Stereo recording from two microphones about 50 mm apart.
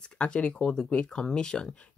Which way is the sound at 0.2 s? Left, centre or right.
Left.